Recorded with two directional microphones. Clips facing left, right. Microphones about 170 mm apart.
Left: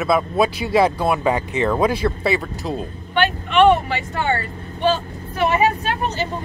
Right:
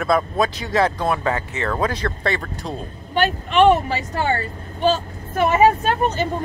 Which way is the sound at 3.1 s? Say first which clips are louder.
Even; 40° right (ahead or behind).